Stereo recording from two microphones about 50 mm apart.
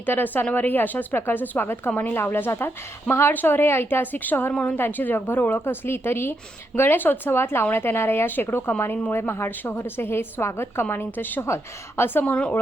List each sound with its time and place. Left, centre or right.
0.0 s a woman's voice: left
11.4 s a woman's voice: left
12.2 s a woman's voice: left